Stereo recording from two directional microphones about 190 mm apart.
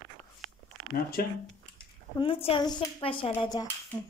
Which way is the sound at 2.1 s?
30° left (ahead or behind).